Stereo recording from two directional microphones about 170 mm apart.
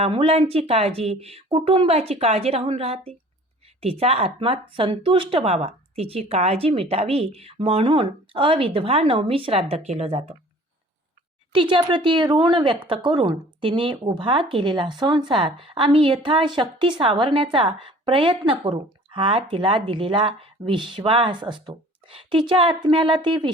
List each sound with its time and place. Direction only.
0.0 s a woman's voice: 35° right (ahead or behind)
11.5 s speech: 30° right (ahead or behind)